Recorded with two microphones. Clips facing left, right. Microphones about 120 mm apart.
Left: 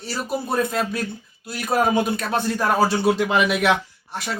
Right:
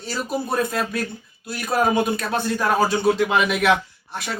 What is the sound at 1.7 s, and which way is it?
Speech, centre (ahead or behind).